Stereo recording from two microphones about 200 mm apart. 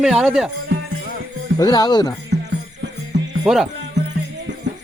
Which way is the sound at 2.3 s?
60° right (ahead or behind).